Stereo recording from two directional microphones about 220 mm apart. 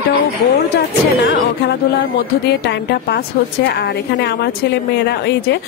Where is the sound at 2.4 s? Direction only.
50° left (ahead or behind).